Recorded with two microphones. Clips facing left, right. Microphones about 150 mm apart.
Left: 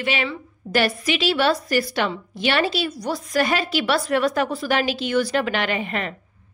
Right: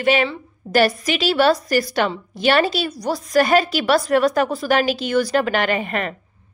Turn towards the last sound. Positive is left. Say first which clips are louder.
# right 3 dB
turn(degrees=-50)  # may be behind; listen again after turning